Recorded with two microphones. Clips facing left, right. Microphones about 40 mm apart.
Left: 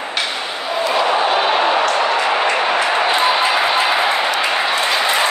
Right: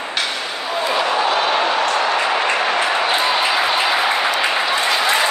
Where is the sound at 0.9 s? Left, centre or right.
Centre.